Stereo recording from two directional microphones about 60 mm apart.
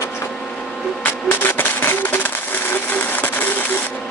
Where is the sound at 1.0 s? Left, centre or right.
Left.